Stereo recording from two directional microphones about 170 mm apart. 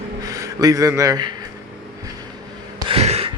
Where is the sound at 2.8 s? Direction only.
35° right (ahead or behind).